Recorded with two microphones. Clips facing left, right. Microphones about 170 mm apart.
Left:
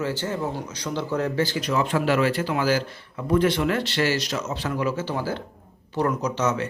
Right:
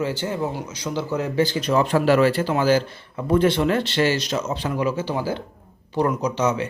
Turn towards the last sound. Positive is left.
turn(degrees=-10)  # may be behind; listen again after turning